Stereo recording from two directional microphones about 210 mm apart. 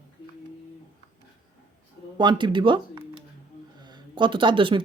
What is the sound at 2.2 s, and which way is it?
Speech, 20° right (ahead or behind).